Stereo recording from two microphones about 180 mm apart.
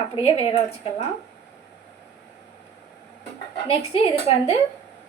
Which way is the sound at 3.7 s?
35° left (ahead or behind).